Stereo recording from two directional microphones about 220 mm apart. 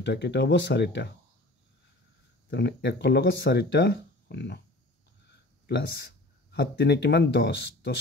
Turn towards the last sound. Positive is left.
turn(degrees=50)  # may be behind; listen again after turning